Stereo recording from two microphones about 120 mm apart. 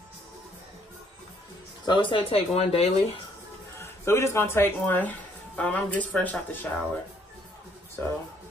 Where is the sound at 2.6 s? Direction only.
60° left (ahead or behind).